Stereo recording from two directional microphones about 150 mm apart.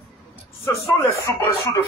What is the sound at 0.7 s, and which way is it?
A man's voice, 15° left (ahead or behind).